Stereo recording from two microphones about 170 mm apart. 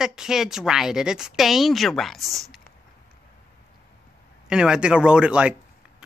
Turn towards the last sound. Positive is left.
turn(degrees=-5)  # may be behind; listen again after turning